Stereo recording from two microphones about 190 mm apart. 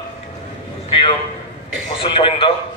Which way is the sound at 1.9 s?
25° left (ahead or behind).